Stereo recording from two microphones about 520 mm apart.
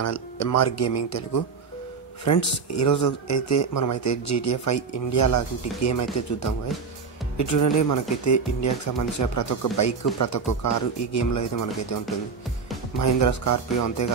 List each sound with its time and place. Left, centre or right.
0.0 s speech: left
7.3 s speech: left
13.0 s speech: left